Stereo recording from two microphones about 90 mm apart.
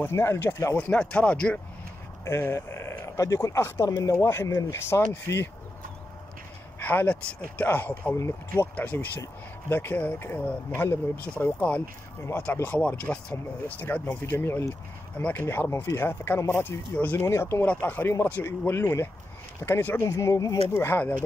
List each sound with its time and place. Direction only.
0.0 s speech: 30° left (ahead or behind)
0.7 s speech: 15° left (ahead or behind)
2.2 s speech: 30° left (ahead or behind)
6.8 s speech: 20° left (ahead or behind)
8.7 s speech: 20° left (ahead or behind)
17.3 s speech: 30° left (ahead or behind)
17.6 s speech: 20° left (ahead or behind)
20.0 s speech: 35° left (ahead or behind)